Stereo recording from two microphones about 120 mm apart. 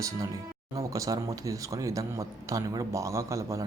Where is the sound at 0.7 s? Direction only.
30° right (ahead or behind).